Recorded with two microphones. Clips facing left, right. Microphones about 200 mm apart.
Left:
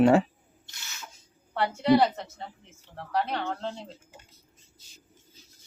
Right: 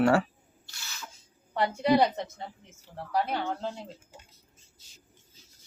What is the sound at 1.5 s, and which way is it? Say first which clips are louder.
A woman's voice: left 2 dB; 15° right (ahead or behind).